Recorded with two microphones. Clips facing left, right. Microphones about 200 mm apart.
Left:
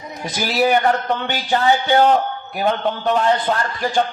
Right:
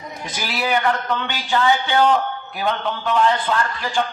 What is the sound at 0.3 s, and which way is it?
Speech, 45° left (ahead or behind).